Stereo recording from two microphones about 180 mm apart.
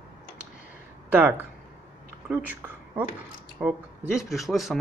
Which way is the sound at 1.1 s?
10° right (ahead or behind).